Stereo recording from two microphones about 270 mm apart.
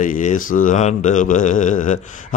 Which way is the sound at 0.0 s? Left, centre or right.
Left.